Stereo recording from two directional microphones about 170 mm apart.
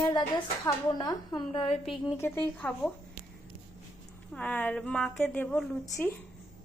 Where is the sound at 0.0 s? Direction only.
25° left (ahead or behind).